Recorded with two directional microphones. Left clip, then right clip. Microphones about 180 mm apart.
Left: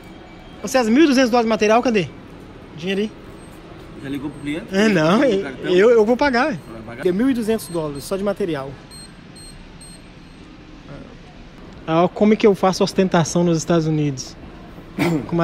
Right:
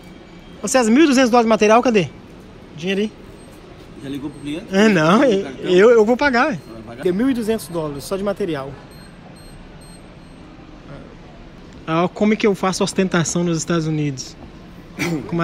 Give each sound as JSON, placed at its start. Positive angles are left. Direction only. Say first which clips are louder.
{"t": 0.6, "sound": "a man's voice", "louder": "right 1 dB", "side_deg": 0}
{"t": 11.8, "sound": "a man's voice", "louder": "left 2 dB", "side_deg": 10}
{"t": 15.3, "sound": "a man's voice", "louder": "left 1 dB", "side_deg": 15}